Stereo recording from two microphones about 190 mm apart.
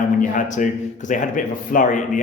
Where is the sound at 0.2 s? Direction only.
40° left (ahead or behind).